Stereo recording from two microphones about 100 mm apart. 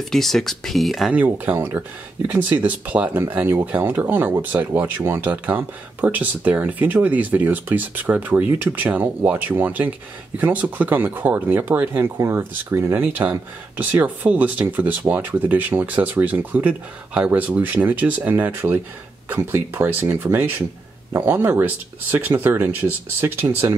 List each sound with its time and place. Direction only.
0.1 s speech: 5° left (ahead or behind)
1.1 s speech: 20° right (ahead or behind)